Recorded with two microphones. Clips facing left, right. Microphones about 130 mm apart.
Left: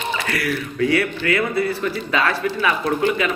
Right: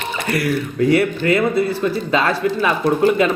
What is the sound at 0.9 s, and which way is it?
Speech, 25° right (ahead or behind).